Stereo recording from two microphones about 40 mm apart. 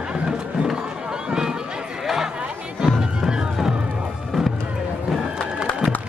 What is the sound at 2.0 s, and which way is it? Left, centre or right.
Chatter, centre.